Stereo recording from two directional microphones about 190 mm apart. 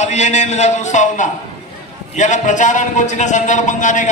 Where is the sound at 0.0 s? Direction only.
40° left (ahead or behind).